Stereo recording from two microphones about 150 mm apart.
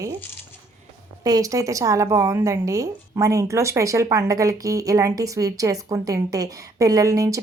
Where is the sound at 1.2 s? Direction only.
25° right (ahead or behind).